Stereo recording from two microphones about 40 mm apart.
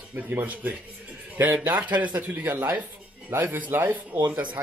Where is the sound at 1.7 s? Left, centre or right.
Right.